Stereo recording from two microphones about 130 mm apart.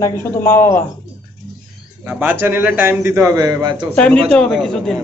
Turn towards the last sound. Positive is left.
turn(degrees=5)  # may be behind; listen again after turning